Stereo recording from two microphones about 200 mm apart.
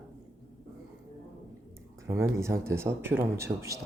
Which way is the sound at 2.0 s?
15° right (ahead or behind).